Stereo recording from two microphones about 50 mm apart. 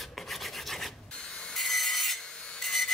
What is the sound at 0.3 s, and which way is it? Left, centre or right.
Filing, centre.